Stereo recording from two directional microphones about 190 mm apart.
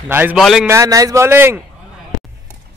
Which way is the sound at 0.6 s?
15° right (ahead or behind).